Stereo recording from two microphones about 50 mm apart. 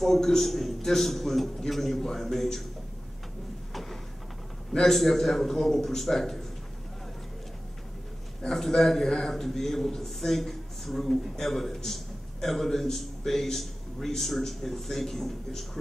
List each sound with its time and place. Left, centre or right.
0.0 s a man's voice: centre
4.7 s a man's voice: centre
8.4 s a man's voice: centre